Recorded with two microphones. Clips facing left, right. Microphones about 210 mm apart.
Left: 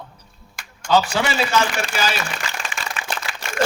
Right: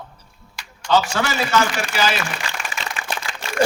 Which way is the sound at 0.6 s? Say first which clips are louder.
Right 2 dB; 50° left (ahead or behind).